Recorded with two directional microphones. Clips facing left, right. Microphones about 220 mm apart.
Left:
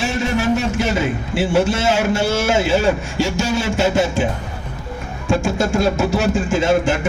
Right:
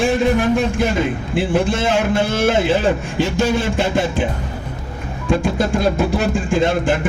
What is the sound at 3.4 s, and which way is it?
Speech, 50° right (ahead or behind).